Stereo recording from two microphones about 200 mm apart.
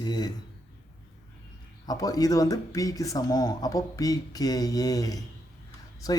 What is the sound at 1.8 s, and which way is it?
Speech, 20° left (ahead or behind).